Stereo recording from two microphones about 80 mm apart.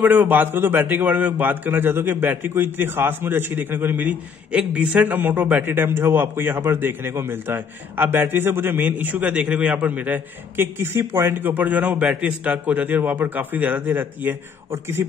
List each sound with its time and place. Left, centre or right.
0.0 s a man's voice: right